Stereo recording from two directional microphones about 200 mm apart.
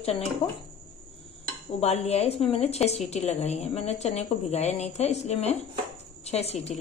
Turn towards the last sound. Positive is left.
turn(degrees=30)  # may be behind; listen again after turning